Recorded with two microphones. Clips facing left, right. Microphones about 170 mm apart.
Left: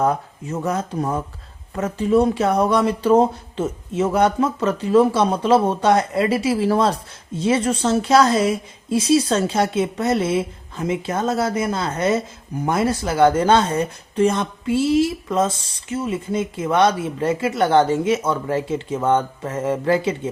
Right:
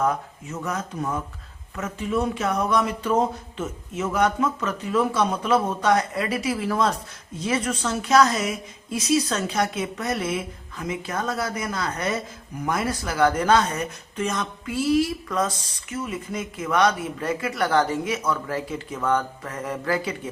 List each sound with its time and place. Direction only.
0.0 s speech: 30° left (ahead or behind)